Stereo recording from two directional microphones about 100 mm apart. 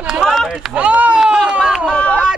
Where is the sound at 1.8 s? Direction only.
5° left (ahead or behind).